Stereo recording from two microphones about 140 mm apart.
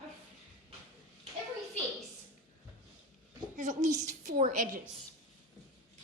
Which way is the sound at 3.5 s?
65° right (ahead or behind).